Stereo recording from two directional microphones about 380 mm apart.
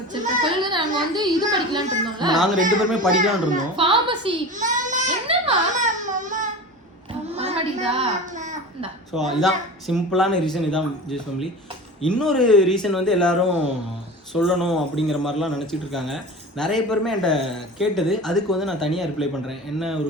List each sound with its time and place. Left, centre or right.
0.6 s a child's voice: centre
2.3 s a man's voice: centre
3.2 s baby cry: centre
7.3 s a sound: centre
9.1 s a man's voice: centre